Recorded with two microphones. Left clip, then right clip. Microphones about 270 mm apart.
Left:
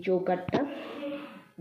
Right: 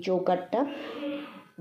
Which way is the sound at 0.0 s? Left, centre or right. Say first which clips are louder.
Right 2 dB; centre.